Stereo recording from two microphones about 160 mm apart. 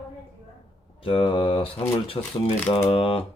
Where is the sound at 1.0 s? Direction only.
35° left (ahead or behind).